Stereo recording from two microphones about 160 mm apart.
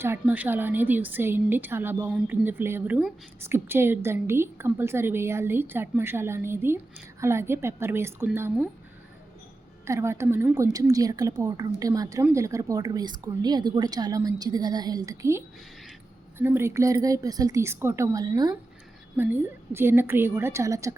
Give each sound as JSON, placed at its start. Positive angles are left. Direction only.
{"t": 0.0, "sound": "a woman's voice", "side_deg": -15}
{"t": 9.8, "sound": "a woman's voice", "side_deg": -15}
{"t": 19.1, "sound": "a woman's voice", "side_deg": -10}